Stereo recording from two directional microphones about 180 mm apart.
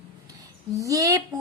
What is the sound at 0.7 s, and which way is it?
Speech, 20° right (ahead or behind).